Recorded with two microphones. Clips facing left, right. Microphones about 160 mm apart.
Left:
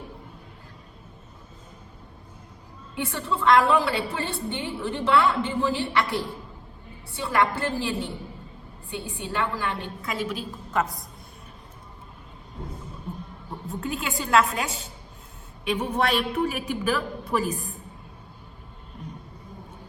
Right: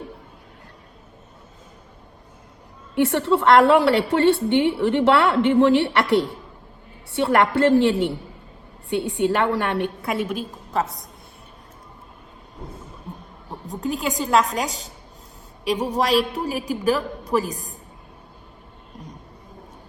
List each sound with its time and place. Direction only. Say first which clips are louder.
2.9 s a woman's voice: right 10 dB; 70° right (ahead or behind); by 10.4 s 55° right (ahead or behind)
13.7 s a woman's voice: right 5 dB; 40° right (ahead or behind)